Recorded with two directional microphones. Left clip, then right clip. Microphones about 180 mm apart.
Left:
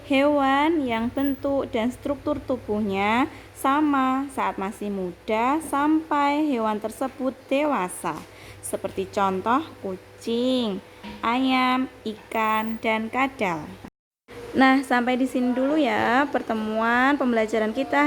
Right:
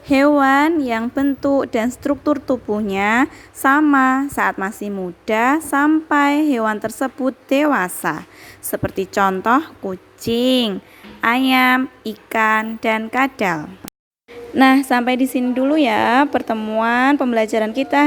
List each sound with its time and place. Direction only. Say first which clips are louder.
0.1 s a woman's voice: right 7 dB; 30° right (ahead or behind)